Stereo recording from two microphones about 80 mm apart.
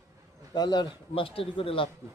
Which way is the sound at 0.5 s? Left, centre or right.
Left.